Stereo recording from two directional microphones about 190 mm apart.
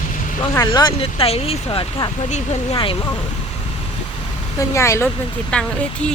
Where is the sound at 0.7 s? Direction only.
25° left (ahead or behind).